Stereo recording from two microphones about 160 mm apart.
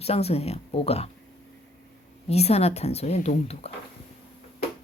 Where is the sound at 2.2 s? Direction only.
40° left (ahead or behind).